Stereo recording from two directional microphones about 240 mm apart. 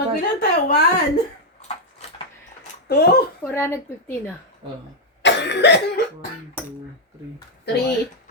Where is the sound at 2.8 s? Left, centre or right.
Left.